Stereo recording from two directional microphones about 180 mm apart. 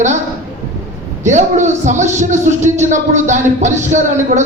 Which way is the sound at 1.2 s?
40° right (ahead or behind).